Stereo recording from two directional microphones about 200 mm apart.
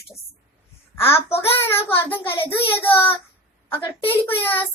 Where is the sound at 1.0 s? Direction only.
10° left (ahead or behind).